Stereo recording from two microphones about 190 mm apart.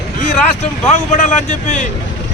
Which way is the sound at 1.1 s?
40° left (ahead or behind).